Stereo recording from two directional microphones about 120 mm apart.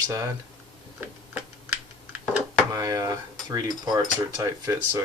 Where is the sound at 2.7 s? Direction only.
30° right (ahead or behind).